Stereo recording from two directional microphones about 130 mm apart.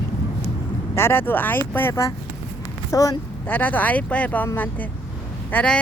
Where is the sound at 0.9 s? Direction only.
20° left (ahead or behind).